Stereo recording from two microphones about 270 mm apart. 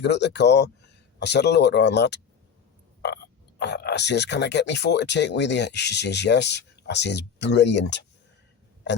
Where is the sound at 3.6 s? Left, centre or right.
Left.